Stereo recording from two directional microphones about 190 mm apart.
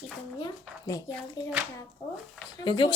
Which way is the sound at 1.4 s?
25° left (ahead or behind).